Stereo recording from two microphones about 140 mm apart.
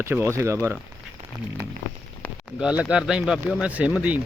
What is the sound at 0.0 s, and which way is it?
Speech, 15° right (ahead or behind).